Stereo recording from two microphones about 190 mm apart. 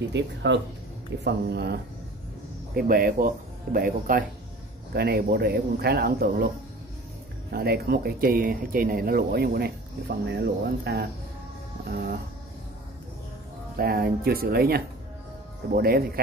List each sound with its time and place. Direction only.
0.1 s speech: 70° right (ahead or behind)
2.7 s speech: 50° right (ahead or behind)
7.5 s speech: 55° right (ahead or behind)
13.7 s speech: 55° right (ahead or behind)